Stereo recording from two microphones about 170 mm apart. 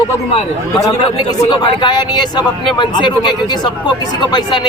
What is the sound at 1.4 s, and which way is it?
Speech, 25° left (ahead or behind).